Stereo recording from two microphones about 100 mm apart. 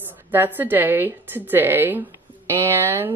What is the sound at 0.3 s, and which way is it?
A woman's voice, 20° right (ahead or behind).